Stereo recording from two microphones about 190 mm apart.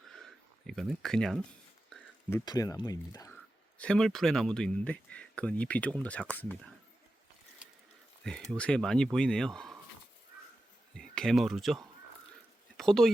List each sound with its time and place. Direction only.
0.7 s speech: centre (ahead or behind)
2.3 s speech: 20° left (ahead or behind)
3.8 s speech: 5° left (ahead or behind)
8.4 s speech: 5° left (ahead or behind)
10.9 s speech: 5° left (ahead or behind)